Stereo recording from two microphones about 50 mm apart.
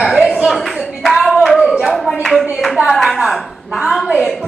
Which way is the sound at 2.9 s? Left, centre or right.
Centre.